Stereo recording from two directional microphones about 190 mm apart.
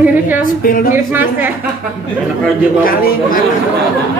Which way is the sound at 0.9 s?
10° right (ahead or behind).